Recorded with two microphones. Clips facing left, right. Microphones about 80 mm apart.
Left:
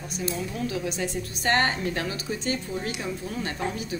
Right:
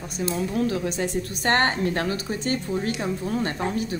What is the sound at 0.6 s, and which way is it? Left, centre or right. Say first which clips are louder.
A woman's voice: right 5 dB; right.